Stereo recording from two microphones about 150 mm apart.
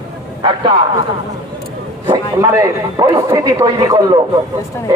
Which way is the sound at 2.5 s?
20° right (ahead or behind).